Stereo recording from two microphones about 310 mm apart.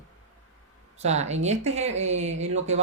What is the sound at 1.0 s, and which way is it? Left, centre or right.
Speech, right.